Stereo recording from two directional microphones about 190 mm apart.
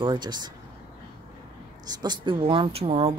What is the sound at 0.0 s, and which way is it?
Speech, 25° right (ahead or behind).